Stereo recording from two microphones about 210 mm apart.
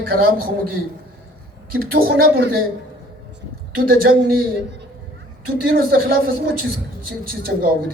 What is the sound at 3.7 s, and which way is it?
Speech, 45° right (ahead or behind).